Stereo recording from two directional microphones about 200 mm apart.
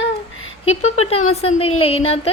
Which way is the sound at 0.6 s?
30° left (ahead or behind).